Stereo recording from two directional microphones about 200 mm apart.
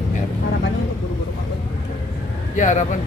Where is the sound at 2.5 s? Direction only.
40° left (ahead or behind).